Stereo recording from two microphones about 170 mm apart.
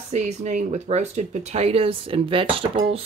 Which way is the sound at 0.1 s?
40° right (ahead or behind).